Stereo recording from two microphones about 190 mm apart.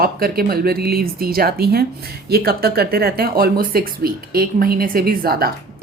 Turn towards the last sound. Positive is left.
turn(degrees=-55)  # may be behind; listen again after turning